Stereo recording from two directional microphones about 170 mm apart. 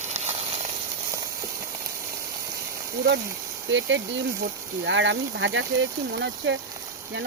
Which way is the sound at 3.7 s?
90° right.